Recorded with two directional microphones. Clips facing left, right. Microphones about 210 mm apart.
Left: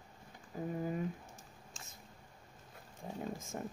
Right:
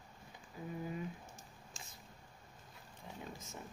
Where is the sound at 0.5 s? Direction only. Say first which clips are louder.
Left 7 dB; 45° left (ahead or behind).